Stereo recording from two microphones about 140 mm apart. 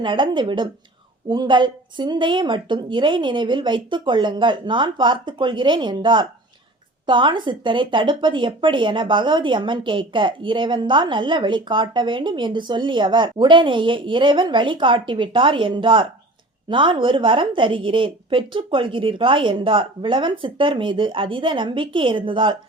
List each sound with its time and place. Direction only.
0.0 s speech: 35° right (ahead or behind)